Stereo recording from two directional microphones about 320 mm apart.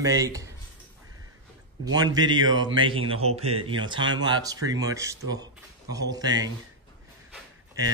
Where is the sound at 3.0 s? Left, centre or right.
Right.